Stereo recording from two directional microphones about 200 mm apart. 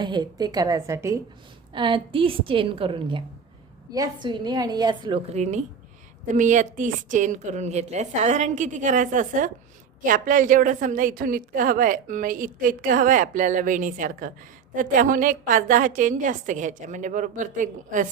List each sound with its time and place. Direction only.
0.0 s a woman's voice: 20° right (ahead or behind); by 18.1 s 40° right (ahead or behind)